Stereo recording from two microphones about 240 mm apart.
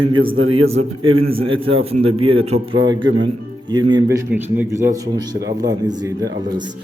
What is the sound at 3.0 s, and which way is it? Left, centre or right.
Speech, right.